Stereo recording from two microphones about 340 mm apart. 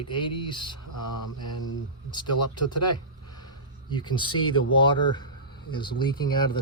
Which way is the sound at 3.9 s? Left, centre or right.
Centre.